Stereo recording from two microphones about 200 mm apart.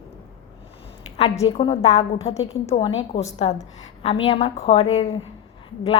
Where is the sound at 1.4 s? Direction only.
25° left (ahead or behind).